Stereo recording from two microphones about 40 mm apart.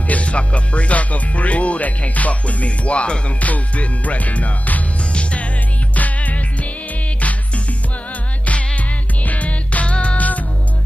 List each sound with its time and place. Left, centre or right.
0.1 s speech: left
5.1 s music: left
10.1 s music: left